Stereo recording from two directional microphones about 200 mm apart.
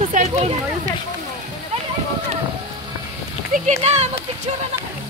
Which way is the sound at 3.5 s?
35° right (ahead or behind).